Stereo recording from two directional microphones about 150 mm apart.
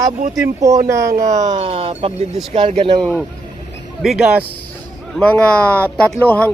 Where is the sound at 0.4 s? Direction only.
20° right (ahead or behind).